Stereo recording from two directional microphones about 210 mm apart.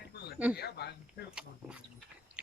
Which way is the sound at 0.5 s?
50° left (ahead or behind).